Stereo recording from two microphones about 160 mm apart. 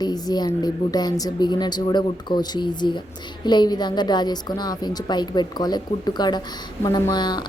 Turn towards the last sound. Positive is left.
turn(degrees=25)  # may be behind; listen again after turning